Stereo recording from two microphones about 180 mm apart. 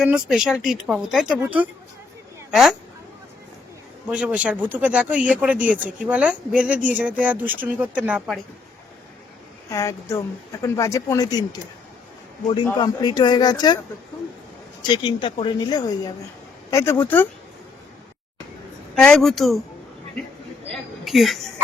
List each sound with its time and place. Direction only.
0.0 s a woman's voice: 5° right (ahead or behind)
4.1 s a woman's voice: 5° right (ahead or behind)
9.6 s speech: 15° left (ahead or behind)
12.8 s speech: 25° left (ahead or behind)
14.8 s speech: 25° left (ahead or behind)
18.9 s speech: 5° left (ahead or behind)
20.7 s a sound: centre (ahead or behind)